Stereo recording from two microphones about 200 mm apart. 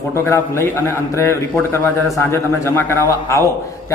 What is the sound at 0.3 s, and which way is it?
A man's voice, 15° left (ahead or behind).